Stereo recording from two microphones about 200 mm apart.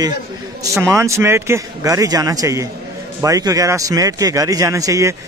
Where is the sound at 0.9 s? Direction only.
15° right (ahead or behind).